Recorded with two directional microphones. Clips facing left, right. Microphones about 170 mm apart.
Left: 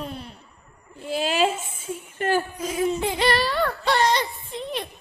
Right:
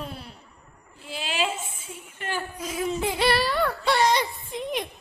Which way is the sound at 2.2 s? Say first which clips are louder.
Left 10 dB; 45° left (ahead or behind).